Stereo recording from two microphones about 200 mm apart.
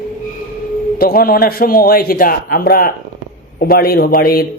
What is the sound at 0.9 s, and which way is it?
A man's voice, 45° left (ahead or behind).